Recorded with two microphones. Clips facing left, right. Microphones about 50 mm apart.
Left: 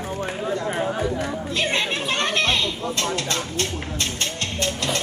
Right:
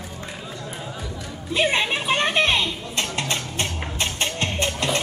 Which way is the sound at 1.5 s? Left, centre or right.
Centre.